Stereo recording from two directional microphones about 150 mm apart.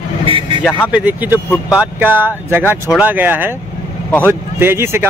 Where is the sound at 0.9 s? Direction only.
10° right (ahead or behind).